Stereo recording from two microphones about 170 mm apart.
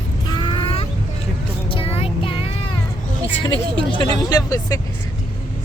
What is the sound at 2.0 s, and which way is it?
Music, 35° left (ahead or behind).